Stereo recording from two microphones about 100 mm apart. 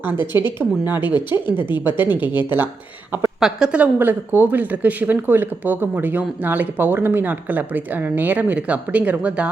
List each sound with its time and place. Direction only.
0.0 s a woman's voice: 20° right (ahead or behind)
3.4 s speech: 10° right (ahead or behind)
3.9 s speech: 20° right (ahead or behind)